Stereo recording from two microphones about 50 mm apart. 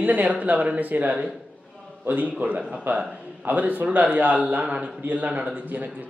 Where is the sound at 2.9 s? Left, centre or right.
Right.